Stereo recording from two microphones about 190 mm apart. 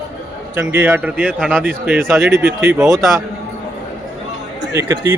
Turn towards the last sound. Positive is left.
turn(degrees=-15)  # may be behind; listen again after turning